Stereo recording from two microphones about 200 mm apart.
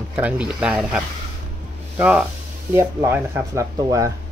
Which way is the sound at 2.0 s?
5° right (ahead or behind).